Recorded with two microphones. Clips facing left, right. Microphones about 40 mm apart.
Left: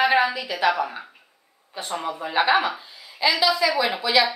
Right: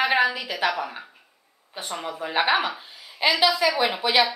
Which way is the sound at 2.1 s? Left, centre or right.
Centre.